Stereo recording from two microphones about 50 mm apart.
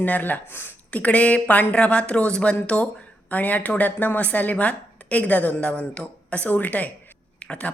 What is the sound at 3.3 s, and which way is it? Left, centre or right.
A woman's voice, left.